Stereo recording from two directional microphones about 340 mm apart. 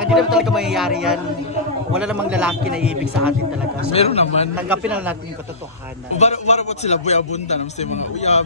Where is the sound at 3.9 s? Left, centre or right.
Centre.